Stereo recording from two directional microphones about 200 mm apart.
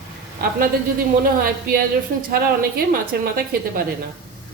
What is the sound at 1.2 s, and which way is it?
Speech, 50° right (ahead or behind).